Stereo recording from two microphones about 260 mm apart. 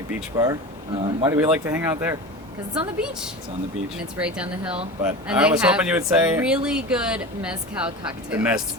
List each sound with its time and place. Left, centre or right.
0.1 s speech: centre